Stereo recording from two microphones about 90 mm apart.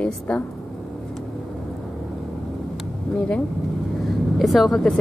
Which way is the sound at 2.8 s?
10° left (ahead or behind).